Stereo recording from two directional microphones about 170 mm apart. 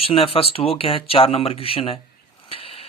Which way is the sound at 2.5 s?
35° left (ahead or behind).